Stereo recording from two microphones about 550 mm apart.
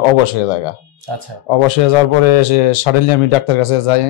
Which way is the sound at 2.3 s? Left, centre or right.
Left.